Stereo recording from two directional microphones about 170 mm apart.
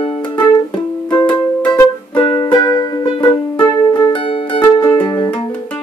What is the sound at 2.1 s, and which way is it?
Music, 25° left (ahead or behind).